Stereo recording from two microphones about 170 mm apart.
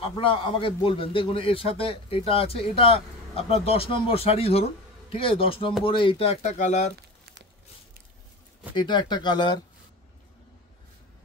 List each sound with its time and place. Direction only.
0.0 s a man's voice: 30° left (ahead or behind)
8.7 s speech: 25° left (ahead or behind)